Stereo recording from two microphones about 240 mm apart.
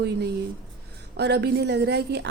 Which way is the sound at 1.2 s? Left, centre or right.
Right.